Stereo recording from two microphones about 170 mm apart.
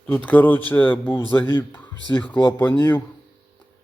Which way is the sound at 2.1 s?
10° left (ahead or behind).